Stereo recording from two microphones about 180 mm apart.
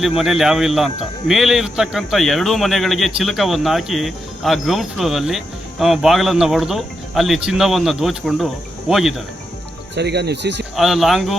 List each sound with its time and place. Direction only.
0.0 s speech: centre (ahead or behind)
9.9 s speech: 70° right (ahead or behind)
10.8 s speech: centre (ahead or behind)